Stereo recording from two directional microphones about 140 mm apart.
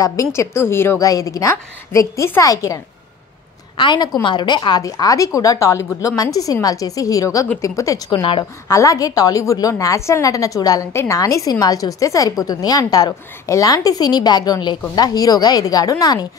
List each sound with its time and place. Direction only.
0.0 s a woman's voice: 25° left (ahead or behind)
8.1 s a woman's voice: 35° left (ahead or behind)
8.6 s a woman's voice: 25° left (ahead or behind)